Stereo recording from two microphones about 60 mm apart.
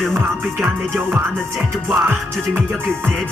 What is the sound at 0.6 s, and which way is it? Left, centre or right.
Music, centre.